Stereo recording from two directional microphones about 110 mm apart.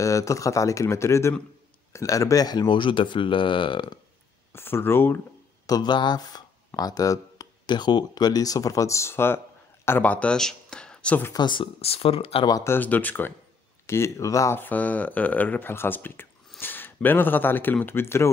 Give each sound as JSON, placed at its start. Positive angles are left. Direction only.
{"t": 0.0, "sound": "speech", "side_deg": 30}
{"t": 4.5, "sound": "speech", "side_deg": 20}
{"t": 5.7, "sound": "speech", "side_deg": 40}
{"t": 11.3, "sound": "speech", "side_deg": 45}
{"t": 11.8, "sound": "speech", "side_deg": 60}
{"t": 12.4, "sound": "speech", "side_deg": 30}
{"t": 12.7, "sound": "speech", "side_deg": 15}